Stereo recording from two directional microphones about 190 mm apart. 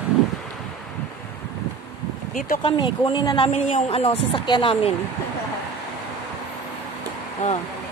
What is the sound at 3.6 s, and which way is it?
A woman's voice, 35° left (ahead or behind).